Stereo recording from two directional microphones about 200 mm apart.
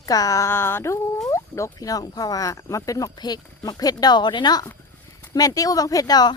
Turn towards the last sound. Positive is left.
turn(degrees=20)  # may be behind; listen again after turning